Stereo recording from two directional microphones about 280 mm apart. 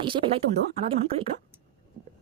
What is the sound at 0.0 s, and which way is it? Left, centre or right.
Speech, centre.